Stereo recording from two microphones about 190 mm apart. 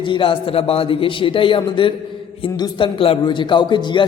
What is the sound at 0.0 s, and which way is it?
A man's voice, 25° left (ahead or behind).